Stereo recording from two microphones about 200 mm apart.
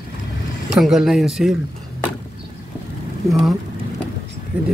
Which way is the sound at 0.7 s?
Centre (ahead or behind).